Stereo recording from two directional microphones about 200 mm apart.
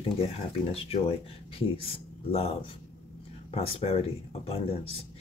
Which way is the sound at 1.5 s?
30° left (ahead or behind).